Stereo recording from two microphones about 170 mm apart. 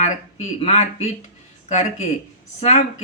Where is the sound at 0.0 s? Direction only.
40° left (ahead or behind).